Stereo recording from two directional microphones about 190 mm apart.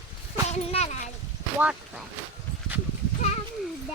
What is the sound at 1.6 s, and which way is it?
Speech, 5° right (ahead or behind).